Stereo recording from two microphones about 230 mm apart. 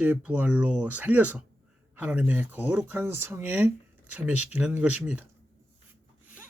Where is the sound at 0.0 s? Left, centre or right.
Centre.